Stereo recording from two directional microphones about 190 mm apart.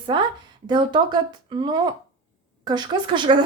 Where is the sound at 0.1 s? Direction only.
25° right (ahead or behind).